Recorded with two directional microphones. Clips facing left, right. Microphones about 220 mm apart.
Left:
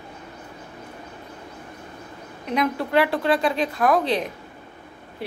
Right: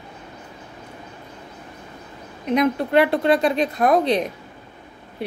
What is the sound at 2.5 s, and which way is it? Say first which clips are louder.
A woman's voice: right 4 dB; 20° right (ahead or behind).